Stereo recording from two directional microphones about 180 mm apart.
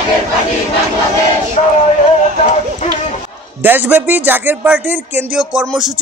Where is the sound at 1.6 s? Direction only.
35° left (ahead or behind).